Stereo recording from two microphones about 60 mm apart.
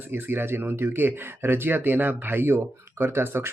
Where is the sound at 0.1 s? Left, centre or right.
Right.